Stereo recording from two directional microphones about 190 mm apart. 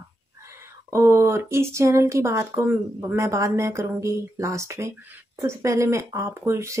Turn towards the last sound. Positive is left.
turn(degrees=-15)  # may be behind; listen again after turning